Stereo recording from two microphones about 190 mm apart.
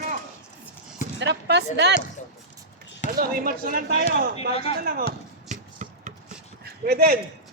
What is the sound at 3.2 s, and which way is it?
Speech, 50° right (ahead or behind).